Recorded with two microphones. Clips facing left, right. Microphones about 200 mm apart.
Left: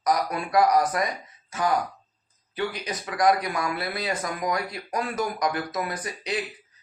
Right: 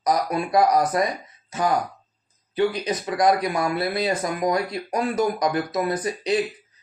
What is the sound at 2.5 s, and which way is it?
Speech, 25° right (ahead or behind).